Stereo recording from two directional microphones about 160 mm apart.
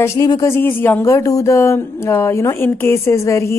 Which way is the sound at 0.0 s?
20° left (ahead or behind).